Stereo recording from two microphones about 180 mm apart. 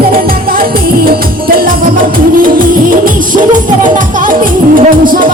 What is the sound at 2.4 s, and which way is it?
Music, 50° right (ahead or behind).